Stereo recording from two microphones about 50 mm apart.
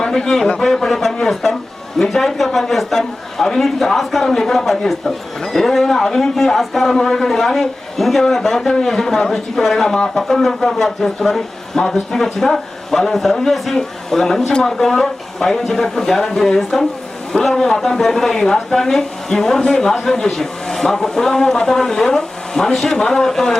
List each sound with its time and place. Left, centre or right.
0.6 s a man's voice: centre